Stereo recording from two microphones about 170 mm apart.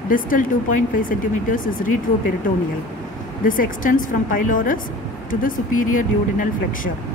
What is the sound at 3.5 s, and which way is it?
Speech, 55° left (ahead or behind).